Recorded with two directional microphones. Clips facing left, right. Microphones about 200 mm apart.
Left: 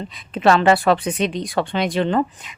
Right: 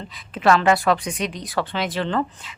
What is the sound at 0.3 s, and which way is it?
Speech, 25° left (ahead or behind).